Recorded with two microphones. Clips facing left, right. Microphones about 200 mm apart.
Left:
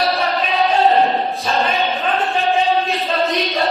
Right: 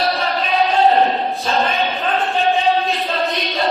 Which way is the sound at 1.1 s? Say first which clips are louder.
Even; centre (ahead or behind).